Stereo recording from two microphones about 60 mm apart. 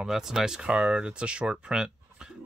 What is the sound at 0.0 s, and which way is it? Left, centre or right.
Speech, centre.